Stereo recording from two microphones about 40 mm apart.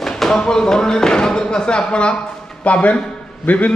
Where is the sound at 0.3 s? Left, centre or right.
Centre.